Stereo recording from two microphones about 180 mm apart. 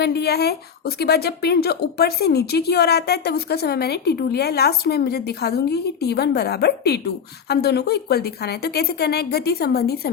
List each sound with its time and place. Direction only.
0.0 s speech: 65° left (ahead or behind)